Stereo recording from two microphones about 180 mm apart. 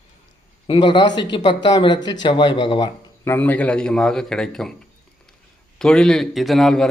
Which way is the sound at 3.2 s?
10° left (ahead or behind).